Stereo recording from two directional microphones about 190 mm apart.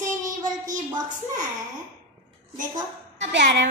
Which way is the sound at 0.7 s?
40° right (ahead or behind).